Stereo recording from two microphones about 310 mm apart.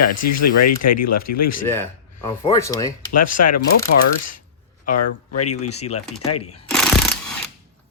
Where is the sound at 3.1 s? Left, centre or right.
Left.